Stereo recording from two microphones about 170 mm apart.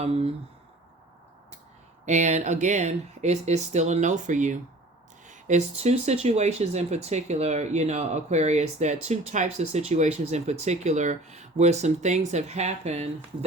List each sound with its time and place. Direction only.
0.0 s speech: 35° right (ahead or behind)
2.0 s speech: 45° right (ahead or behind)